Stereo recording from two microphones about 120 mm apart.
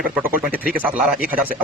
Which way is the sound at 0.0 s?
10° right (ahead or behind).